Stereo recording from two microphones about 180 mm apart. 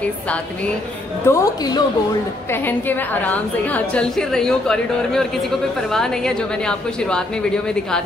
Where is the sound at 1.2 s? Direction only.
20° left (ahead or behind).